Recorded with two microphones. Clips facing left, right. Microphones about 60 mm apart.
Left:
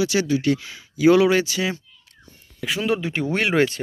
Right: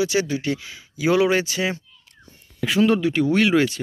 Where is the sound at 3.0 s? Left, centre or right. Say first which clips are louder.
Right 5 dB; left.